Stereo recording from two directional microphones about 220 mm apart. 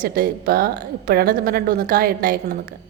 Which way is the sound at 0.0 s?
40° right (ahead or behind).